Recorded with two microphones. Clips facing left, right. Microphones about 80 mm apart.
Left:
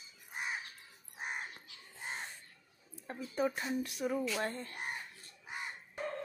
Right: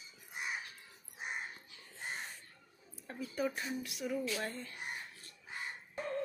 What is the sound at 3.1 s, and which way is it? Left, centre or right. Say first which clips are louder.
Speech: left 2 dB; left.